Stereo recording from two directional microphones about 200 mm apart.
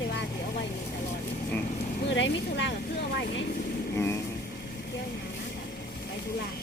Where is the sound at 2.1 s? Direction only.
65° left (ahead or behind).